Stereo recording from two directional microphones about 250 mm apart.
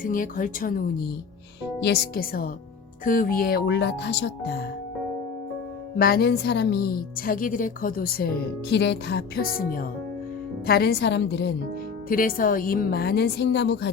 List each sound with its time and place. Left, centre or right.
0.0 s a woman's voice: left
6.0 s a woman's voice: left